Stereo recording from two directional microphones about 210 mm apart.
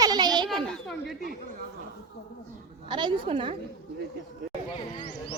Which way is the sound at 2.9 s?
20° right (ahead or behind).